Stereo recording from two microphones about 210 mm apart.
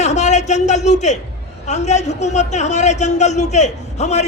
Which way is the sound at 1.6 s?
35° left (ahead or behind).